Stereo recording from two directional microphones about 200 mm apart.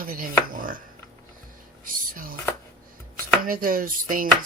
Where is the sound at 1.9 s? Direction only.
45° right (ahead or behind).